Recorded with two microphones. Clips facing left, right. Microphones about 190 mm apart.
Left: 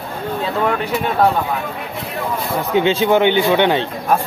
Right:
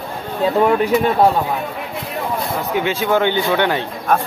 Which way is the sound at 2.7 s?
25° left (ahead or behind).